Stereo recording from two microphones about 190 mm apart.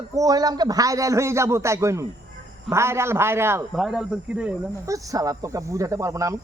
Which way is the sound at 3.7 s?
Centre (ahead or behind).